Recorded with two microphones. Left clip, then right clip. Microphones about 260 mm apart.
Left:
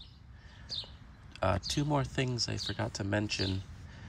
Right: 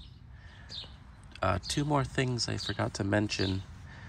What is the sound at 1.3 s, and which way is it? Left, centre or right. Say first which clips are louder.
Speech: right 1 dB; centre.